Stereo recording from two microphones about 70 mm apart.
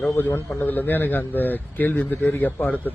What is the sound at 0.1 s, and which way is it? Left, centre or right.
A man's voice, left.